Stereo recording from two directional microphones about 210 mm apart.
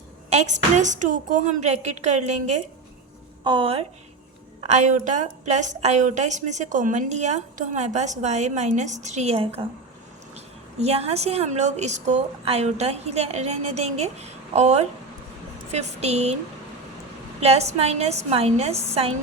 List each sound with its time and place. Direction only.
0.3 s a woman's voice: 35° right (ahead or behind)
17.4 s a woman's voice: 30° right (ahead or behind)